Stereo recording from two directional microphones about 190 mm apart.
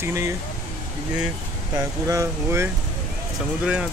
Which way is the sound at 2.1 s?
15° right (ahead or behind).